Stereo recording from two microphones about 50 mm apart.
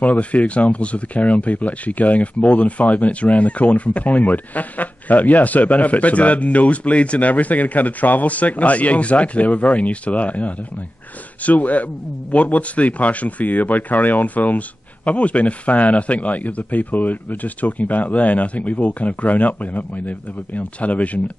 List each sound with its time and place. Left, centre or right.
0.0 s speech: left